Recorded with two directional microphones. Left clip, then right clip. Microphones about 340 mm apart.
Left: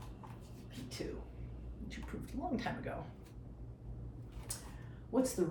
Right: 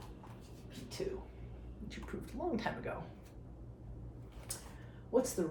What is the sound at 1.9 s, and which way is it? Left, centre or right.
Speech, centre.